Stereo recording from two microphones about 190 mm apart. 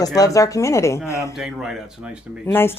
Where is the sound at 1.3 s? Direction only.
Centre (ahead or behind).